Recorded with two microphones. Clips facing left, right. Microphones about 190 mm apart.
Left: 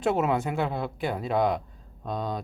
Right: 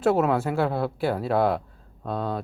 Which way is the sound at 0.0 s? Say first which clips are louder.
Right 3 dB; 5° right (ahead or behind).